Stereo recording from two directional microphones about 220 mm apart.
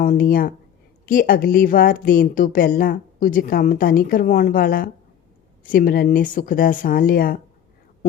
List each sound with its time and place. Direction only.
0.0 s a woman's voice: 40° left (ahead or behind)